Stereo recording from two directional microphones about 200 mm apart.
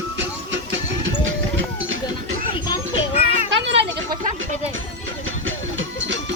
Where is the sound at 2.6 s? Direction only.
25° left (ahead or behind).